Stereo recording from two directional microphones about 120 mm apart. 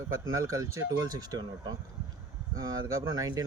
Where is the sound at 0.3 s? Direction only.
25° right (ahead or behind).